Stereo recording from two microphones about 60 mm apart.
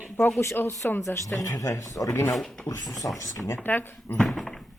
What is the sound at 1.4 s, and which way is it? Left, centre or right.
Speech, left.